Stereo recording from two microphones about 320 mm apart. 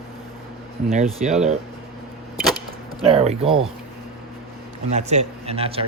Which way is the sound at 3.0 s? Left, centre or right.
Centre.